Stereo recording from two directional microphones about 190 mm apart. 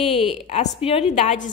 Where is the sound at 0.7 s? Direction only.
30° left (ahead or behind).